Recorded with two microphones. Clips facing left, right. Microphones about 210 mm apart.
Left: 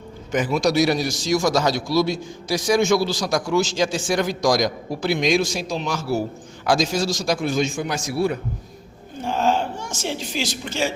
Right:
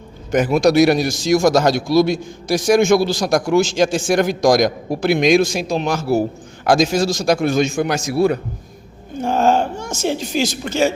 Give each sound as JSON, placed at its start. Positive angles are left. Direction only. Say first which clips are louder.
{"t": 0.4, "sound": "a man's voice", "louder": "right 6 dB", "side_deg": -60}
{"t": 9.2, "sound": "a woman's voice", "louder": "right 5 dB", "side_deg": -45}